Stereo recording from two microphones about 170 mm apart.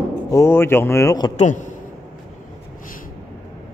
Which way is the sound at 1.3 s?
45° left (ahead or behind).